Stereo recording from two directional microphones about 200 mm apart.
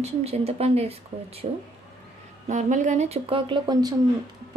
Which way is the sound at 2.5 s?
40° right (ahead or behind).